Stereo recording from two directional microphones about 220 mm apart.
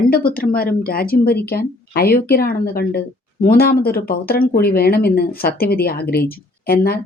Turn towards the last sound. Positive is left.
turn(degrees=45)  # may be behind; listen again after turning